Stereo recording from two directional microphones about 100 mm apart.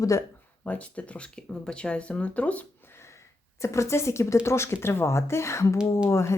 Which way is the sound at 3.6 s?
30° left (ahead or behind).